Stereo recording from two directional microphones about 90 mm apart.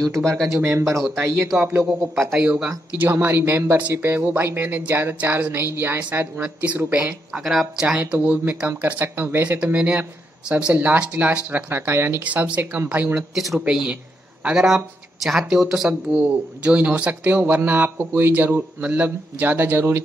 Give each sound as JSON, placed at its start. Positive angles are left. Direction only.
{"t": 0.0, "sound": "speech", "side_deg": 5}
{"t": 0.6, "sound": "speech", "side_deg": -30}
{"t": 12.3, "sound": "speech", "side_deg": -15}
{"t": 13.3, "sound": "speech", "side_deg": 0}